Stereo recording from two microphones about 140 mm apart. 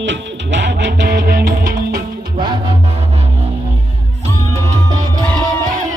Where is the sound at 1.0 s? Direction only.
90° right.